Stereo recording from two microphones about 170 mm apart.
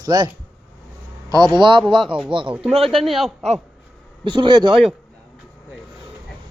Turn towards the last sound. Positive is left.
turn(degrees=-25)  # may be behind; listen again after turning